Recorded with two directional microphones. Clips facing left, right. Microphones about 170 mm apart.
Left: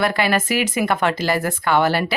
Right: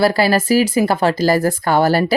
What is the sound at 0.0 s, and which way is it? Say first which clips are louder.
Speech: right 5 dB; 35° right (ahead or behind).